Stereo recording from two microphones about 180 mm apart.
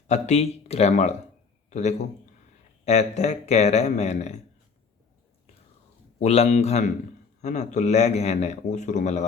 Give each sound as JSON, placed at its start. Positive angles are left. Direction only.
{"t": 0.1, "sound": "a man's voice", "side_deg": 40}
{"t": 6.1, "sound": "a man's voice", "side_deg": 35}